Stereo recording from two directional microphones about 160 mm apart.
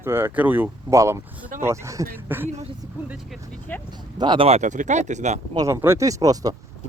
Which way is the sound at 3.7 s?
10° left (ahead or behind).